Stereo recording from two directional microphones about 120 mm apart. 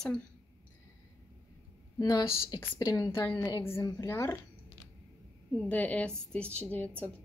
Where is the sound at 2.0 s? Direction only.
35° left (ahead or behind).